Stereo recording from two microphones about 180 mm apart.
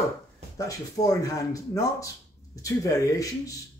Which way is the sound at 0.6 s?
20° left (ahead or behind).